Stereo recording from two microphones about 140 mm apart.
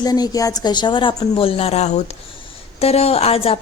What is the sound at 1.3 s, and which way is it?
Speech, 40° left (ahead or behind).